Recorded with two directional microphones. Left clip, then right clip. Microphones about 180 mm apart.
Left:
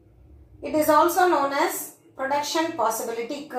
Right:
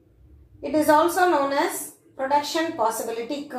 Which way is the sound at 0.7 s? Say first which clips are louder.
Even; 20° right (ahead or behind).